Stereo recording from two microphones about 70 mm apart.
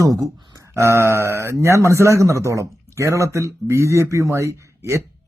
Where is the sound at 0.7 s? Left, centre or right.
Right.